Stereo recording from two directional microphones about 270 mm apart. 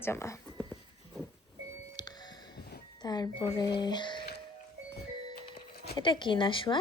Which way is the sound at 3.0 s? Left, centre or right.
Centre.